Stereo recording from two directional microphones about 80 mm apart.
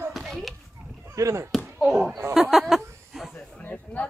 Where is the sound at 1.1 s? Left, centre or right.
Right.